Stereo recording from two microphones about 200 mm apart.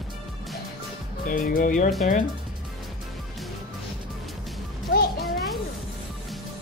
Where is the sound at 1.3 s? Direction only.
45° left (ahead or behind).